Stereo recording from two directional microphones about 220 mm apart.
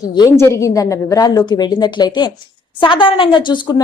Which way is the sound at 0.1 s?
15° left (ahead or behind).